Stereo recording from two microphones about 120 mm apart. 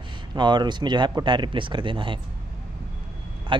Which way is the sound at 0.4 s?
40° right (ahead or behind).